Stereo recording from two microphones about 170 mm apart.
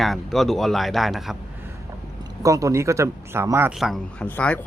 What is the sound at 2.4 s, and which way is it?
Speech, 20° right (ahead or behind).